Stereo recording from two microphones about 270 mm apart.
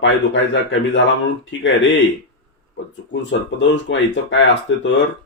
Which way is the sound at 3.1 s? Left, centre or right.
Left.